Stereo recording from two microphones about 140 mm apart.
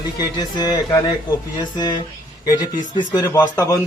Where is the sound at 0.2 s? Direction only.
30° left (ahead or behind).